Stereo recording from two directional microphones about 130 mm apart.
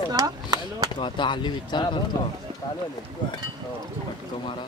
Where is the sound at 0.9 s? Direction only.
35° left (ahead or behind).